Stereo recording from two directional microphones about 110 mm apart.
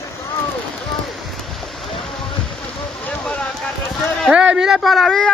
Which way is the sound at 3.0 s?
10° left (ahead or behind).